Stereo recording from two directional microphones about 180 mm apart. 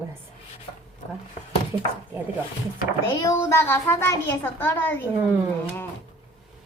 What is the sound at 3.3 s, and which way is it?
A woman's voice, 15° left (ahead or behind).